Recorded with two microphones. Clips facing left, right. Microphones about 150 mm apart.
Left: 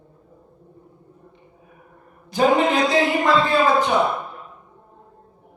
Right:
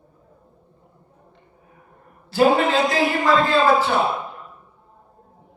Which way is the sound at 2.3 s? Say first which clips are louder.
Right 1 dB; 15° left (ahead or behind).